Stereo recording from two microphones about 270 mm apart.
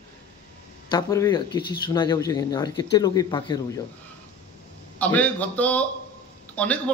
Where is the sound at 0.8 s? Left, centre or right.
Centre.